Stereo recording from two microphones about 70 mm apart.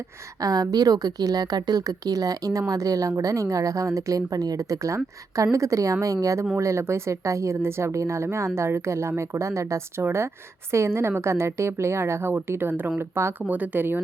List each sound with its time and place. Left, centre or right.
0.3 s a woman's voice: right
13.5 s speech: right